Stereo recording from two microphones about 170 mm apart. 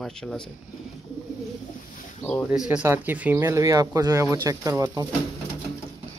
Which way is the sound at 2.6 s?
10° right (ahead or behind).